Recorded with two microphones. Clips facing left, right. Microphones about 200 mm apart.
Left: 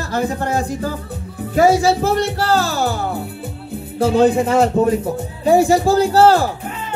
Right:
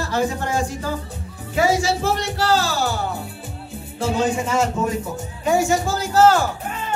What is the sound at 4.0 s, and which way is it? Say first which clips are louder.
Speech: left 8 dB; 60° left (ahead or behind).